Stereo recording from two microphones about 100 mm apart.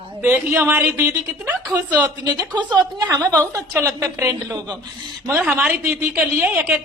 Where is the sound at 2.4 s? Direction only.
45° right (ahead or behind).